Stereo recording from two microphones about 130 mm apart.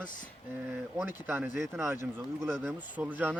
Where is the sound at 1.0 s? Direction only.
15° right (ahead or behind).